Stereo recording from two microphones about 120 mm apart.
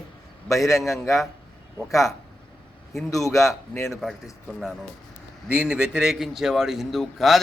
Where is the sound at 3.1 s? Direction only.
25° left (ahead or behind).